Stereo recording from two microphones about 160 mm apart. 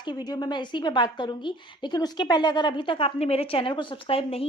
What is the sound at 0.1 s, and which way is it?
A woman's voice, 25° left (ahead or behind).